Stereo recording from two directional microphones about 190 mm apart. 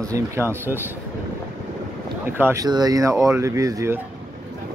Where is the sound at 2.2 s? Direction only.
10° right (ahead or behind).